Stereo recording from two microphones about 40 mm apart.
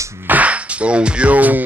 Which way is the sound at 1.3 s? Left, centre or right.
Right.